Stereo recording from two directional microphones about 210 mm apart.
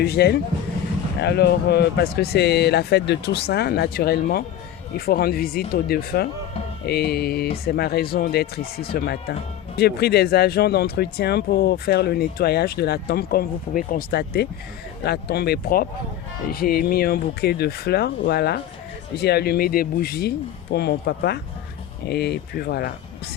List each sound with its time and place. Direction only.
0.0 s speech: 50° left (ahead or behind)